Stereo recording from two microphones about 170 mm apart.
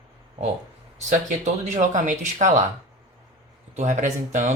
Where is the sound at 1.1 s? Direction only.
45° right (ahead or behind).